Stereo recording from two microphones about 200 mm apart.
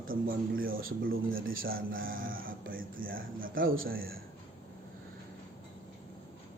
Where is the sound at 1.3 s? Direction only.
80° right.